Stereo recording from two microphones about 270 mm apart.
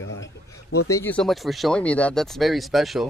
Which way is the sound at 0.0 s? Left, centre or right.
Left.